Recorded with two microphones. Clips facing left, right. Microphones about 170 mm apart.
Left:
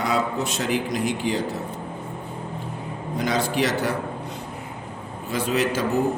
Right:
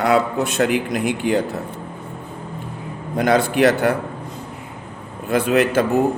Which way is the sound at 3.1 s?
55° right (ahead or behind).